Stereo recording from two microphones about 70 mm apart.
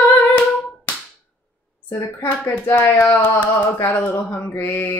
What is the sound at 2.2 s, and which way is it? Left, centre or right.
Speech, left.